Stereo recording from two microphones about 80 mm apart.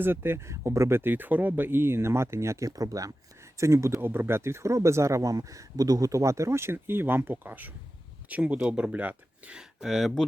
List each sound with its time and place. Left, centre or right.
0.0 s speech: right
3.6 s speech: right; by 10.2 s centre